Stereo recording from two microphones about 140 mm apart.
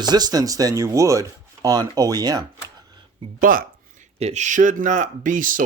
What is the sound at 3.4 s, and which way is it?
Speech, 85° right.